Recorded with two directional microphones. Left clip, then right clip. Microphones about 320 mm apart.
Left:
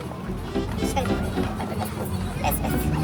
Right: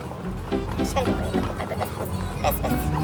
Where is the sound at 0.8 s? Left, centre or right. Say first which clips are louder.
Right 1 dB; centre.